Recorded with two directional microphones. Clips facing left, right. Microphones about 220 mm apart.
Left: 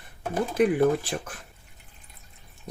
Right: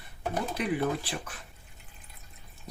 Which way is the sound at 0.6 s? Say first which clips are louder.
Left 11 dB; 50° left (ahead or behind).